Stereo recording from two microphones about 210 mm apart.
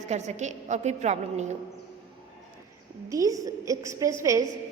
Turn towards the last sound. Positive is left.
turn(degrees=-15)  # may be behind; listen again after turning